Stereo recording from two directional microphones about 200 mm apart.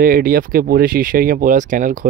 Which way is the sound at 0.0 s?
45° right (ahead or behind).